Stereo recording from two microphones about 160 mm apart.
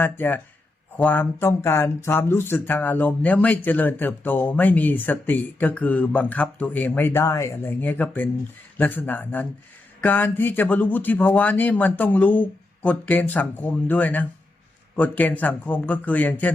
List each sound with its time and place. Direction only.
0.0 s speech: 10° left (ahead or behind)